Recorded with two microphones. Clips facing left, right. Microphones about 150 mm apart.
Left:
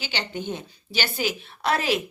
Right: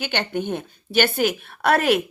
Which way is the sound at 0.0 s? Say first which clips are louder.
Right 6 dB; 55° right (ahead or behind).